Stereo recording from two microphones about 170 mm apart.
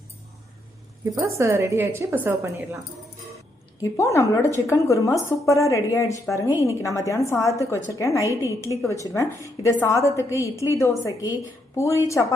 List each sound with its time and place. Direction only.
1.1 s a woman's voice: 15° right (ahead or behind)
3.8 s a woman's voice: 20° left (ahead or behind)